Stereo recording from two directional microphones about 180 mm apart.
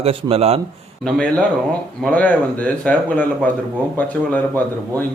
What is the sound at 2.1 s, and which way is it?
A man's voice, 10° left (ahead or behind).